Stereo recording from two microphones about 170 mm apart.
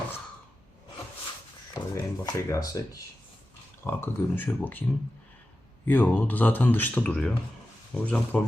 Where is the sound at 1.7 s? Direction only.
20° left (ahead or behind).